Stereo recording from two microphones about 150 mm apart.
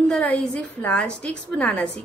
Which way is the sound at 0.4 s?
10° left (ahead or behind).